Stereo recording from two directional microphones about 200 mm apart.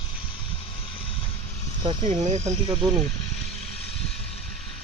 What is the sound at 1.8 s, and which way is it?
Speech, 30° right (ahead or behind).